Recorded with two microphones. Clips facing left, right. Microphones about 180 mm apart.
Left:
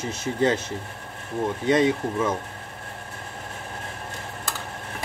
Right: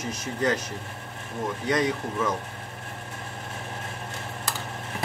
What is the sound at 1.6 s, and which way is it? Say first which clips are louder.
Speech: left 5 dB; 25° left (ahead or behind).